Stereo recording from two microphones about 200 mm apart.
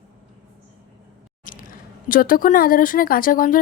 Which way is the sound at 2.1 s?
45° left (ahead or behind).